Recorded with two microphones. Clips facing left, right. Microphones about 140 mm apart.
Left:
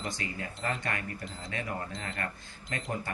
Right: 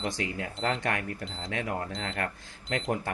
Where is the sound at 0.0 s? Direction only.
90° right.